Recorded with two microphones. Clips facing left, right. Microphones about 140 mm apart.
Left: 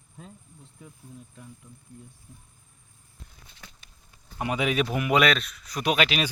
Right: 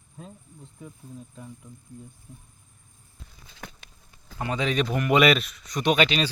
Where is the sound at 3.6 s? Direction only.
55° right (ahead or behind).